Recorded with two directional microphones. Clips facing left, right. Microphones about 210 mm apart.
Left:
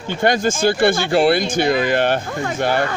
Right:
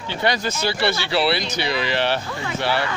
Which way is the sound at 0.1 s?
50° left (ahead or behind).